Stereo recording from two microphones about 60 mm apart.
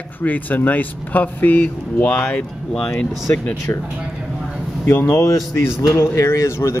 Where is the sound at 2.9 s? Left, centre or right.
Left.